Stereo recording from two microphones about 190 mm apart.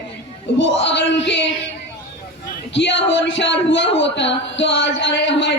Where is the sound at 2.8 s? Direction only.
70° left (ahead or behind).